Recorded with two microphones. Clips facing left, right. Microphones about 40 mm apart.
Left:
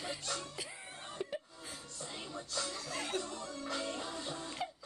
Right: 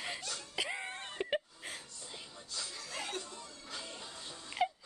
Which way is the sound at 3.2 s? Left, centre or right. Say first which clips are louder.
Left 7 dB; left.